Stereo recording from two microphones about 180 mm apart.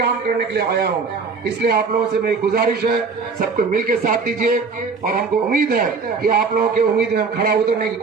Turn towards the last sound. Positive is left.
turn(degrees=-60)  # may be behind; listen again after turning